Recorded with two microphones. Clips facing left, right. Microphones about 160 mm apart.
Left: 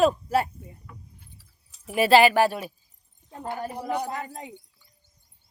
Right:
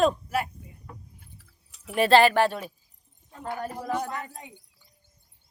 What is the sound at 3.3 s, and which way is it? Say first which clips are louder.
Speech: left 1 dB; 30° left (ahead or behind).